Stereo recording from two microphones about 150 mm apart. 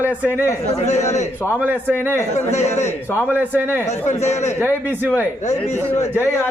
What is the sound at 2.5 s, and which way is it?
Speech, 50° left (ahead or behind).